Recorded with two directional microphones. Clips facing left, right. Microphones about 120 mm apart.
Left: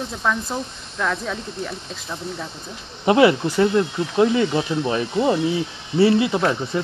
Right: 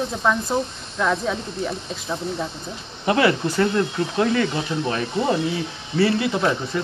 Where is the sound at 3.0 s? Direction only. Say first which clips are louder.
Left 4 dB; 20° left (ahead or behind).